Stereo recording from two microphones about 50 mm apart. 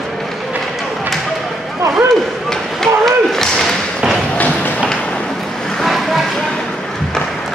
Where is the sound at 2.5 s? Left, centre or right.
Centre.